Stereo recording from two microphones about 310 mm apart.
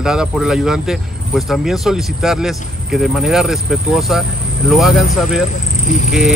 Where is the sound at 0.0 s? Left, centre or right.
Centre.